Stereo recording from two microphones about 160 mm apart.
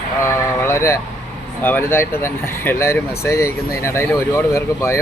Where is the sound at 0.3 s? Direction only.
15° left (ahead or behind).